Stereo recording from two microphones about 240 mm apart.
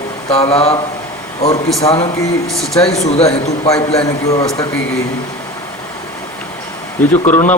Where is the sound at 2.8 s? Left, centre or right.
Left.